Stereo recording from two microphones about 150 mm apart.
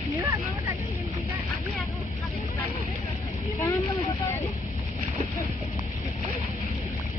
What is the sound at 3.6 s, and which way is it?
Vehicle, 20° left (ahead or behind).